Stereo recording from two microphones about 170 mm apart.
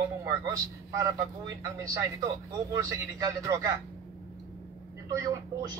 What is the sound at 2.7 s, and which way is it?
Speech, 20° right (ahead or behind).